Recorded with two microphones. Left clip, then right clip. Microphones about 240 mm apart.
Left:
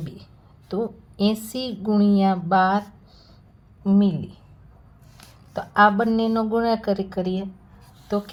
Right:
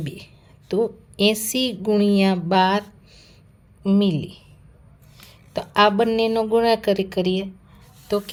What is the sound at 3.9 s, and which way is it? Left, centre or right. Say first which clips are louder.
Speech: right 1 dB; right.